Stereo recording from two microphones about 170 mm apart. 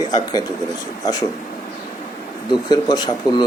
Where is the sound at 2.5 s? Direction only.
25° left (ahead or behind).